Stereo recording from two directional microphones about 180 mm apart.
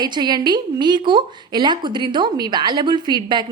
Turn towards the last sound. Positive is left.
turn(degrees=-25)  # may be behind; listen again after turning